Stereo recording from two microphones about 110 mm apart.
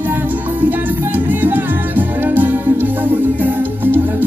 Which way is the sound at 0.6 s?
15° right (ahead or behind).